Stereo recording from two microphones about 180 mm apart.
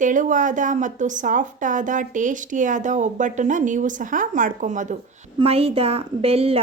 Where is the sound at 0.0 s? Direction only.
45° right (ahead or behind).